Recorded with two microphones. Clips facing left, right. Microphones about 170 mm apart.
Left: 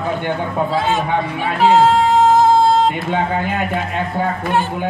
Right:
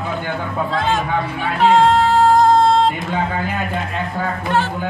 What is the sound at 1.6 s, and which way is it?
Music, 5° left (ahead or behind).